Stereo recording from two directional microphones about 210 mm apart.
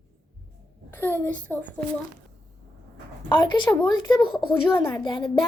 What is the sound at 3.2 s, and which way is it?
Speech, 20° left (ahead or behind).